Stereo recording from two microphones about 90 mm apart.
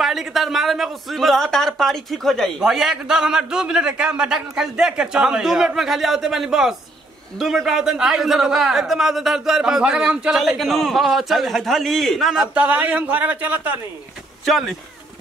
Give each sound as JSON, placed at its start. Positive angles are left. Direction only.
{"t": 0.0, "sound": "a man's voice", "side_deg": -5}
{"t": 12.5, "sound": "a man's voice", "side_deg": -15}
{"t": 14.4, "sound": "speech", "side_deg": 0}